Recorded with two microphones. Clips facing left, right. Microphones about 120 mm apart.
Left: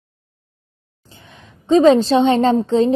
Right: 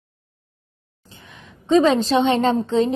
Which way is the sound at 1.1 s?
35° left (ahead or behind).